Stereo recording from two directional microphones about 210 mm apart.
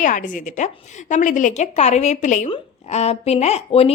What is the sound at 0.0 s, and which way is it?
A woman's voice, 40° left (ahead or behind).